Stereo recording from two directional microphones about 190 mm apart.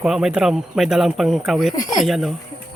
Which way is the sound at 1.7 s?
20° left (ahead or behind).